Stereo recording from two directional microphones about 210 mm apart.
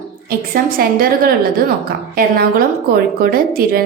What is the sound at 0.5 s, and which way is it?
A woman's voice, 45° right (ahead or behind).